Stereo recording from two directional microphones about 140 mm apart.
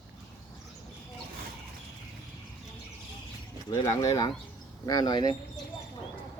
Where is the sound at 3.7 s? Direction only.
25° left (ahead or behind).